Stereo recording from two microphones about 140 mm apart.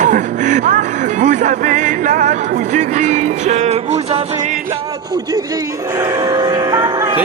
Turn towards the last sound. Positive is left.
turn(degrees=-30)  # may be behind; listen again after turning